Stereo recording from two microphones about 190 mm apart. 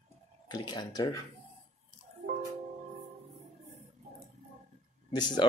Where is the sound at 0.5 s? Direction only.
20° left (ahead or behind).